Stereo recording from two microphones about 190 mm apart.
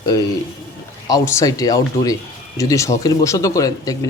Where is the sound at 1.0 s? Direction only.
15° left (ahead or behind).